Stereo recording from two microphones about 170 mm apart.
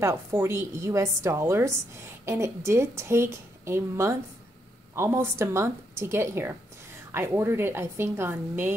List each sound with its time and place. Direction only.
0.0 s a woman's voice: 15° right (ahead or behind)